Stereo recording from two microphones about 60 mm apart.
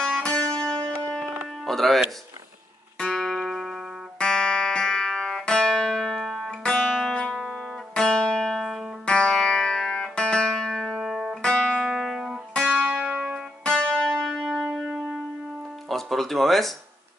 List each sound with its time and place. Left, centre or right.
0.2 s music: centre
1.6 s music: centre
3.0 s music: centre
4.2 s music: centre
6.5 s music: centre
9.0 s music: centre
11.0 s music: centre
11.4 s music: centre
11.8 s music: centre
12.6 s music: right
13.7 s music: centre
14.3 s music: centre